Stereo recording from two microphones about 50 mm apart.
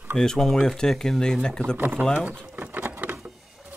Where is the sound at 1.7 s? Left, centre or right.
Right.